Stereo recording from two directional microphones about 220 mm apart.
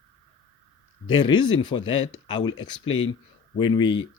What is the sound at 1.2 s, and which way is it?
Speech, 20° left (ahead or behind).